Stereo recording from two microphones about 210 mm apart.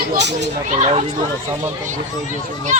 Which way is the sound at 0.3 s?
30° right (ahead or behind).